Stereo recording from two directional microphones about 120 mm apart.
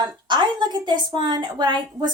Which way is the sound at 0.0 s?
35° right (ahead or behind).